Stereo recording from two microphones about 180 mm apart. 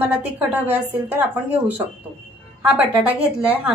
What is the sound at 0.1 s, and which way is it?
A woman's voice, 10° right (ahead or behind).